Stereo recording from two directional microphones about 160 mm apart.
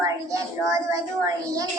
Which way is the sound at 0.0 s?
20° right (ahead or behind).